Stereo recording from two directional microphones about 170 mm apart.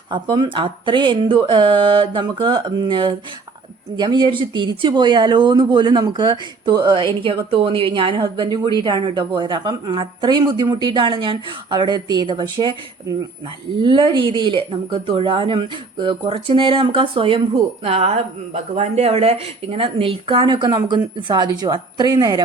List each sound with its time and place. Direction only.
0.1 s speech: 25° right (ahead or behind)